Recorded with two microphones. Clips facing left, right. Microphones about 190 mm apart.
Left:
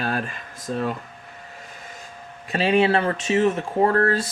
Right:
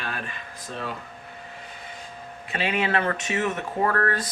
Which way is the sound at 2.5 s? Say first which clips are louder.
Left 7 dB; 35° left (ahead or behind).